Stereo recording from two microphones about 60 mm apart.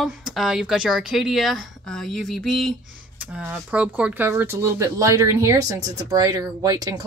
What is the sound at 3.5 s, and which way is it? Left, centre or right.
Speech, right.